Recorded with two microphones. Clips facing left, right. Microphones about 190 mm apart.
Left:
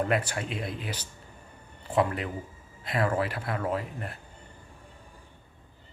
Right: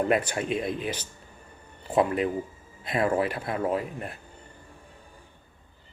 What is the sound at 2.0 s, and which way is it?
Speech, 20° right (ahead or behind).